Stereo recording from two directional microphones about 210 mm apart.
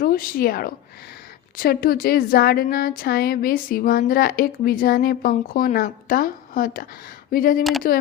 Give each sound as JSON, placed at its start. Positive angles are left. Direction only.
{"t": 0.0, "sound": "a woman's voice", "side_deg": 45}